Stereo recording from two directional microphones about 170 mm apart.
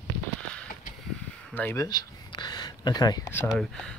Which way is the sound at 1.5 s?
15° left (ahead or behind).